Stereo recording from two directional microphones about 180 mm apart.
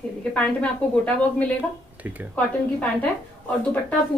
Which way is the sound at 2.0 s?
10° right (ahead or behind).